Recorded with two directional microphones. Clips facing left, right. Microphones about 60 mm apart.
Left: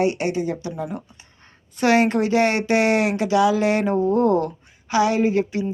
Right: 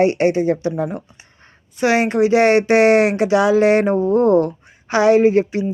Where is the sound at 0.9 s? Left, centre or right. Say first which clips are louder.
Right 3 dB; right.